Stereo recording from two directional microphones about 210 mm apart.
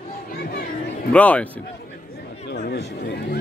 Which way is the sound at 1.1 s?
5° left (ahead or behind).